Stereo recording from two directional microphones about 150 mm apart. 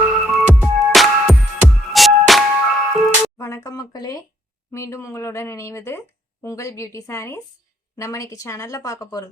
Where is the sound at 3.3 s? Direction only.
20° left (ahead or behind).